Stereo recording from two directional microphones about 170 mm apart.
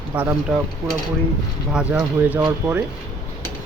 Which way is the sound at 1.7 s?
5° right (ahead or behind).